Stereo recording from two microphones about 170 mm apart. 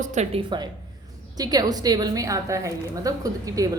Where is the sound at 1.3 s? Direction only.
25° right (ahead or behind).